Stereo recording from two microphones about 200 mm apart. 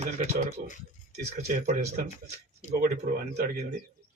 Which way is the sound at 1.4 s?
35° right (ahead or behind).